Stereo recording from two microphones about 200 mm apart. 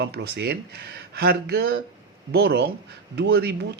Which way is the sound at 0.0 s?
55° right (ahead or behind).